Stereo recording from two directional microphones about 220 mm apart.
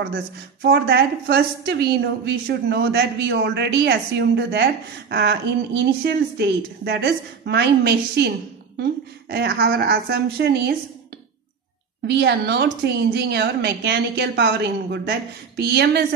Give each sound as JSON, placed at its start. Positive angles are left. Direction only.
{"t": 0.7, "sound": "a woman's voice", "side_deg": -50}
{"t": 9.3, "sound": "a woman's voice", "side_deg": -45}
{"t": 12.1, "sound": "a woman's voice", "side_deg": -50}